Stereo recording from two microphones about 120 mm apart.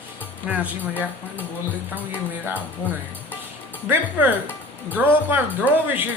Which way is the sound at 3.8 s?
15° right (ahead or behind).